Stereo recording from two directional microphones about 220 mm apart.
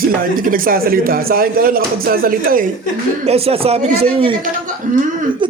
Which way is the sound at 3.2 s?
25° right (ahead or behind).